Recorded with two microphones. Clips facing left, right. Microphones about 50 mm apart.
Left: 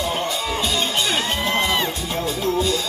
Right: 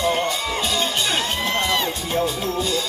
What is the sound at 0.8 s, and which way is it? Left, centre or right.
Music, left.